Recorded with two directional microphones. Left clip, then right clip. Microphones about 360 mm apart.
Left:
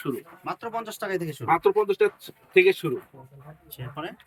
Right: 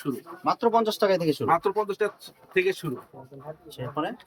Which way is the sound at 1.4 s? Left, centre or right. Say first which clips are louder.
Left 7 dB; centre.